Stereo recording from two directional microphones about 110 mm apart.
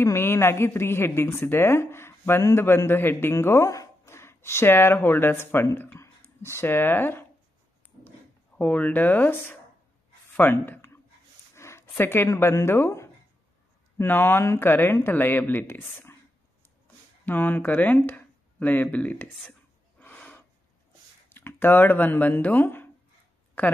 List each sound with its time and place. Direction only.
0.0 s a woman's voice: 20° left (ahead or behind)
8.5 s speech: 10° left (ahead or behind)
11.5 s a sound: 25° left (ahead or behind)
12.0 s a woman's voice: 20° left (ahead or behind)
20.0 s gasp: 15° left (ahead or behind)
21.3 s speech: 20° left (ahead or behind)